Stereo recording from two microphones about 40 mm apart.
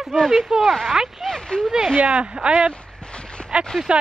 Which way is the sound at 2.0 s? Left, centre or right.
Right.